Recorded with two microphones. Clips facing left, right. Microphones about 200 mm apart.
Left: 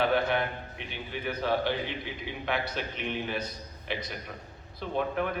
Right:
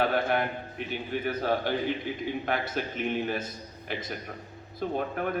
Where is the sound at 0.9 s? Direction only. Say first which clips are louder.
Right 4 dB; 45° right (ahead or behind).